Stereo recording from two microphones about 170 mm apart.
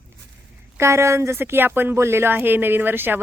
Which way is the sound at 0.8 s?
15° right (ahead or behind).